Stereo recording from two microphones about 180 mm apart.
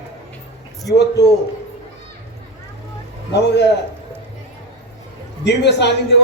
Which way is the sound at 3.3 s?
70° left (ahead or behind).